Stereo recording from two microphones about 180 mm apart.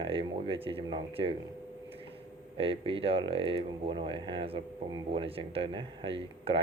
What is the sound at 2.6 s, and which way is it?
Speech, 30° right (ahead or behind).